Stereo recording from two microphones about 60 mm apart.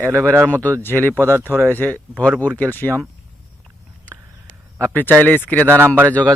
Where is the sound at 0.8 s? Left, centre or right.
Left.